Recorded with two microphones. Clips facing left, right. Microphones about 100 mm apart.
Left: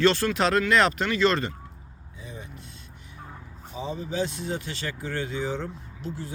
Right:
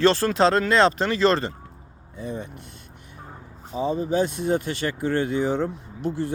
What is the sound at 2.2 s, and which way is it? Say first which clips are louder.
Speech: right 10 dB; 60° right (ahead or behind).